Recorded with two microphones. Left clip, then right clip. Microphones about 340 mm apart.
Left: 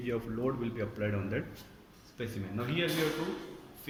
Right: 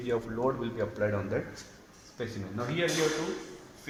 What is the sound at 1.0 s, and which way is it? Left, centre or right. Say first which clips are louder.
Speech: right 5 dB; right.